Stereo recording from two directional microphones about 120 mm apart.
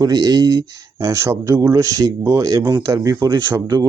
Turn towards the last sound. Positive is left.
turn(degrees=-35)  # may be behind; listen again after turning